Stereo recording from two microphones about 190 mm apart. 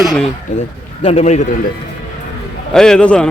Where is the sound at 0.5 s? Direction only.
40° left (ahead or behind).